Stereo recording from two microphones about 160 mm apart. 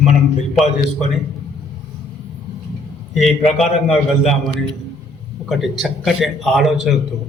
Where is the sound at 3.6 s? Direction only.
Centre (ahead or behind).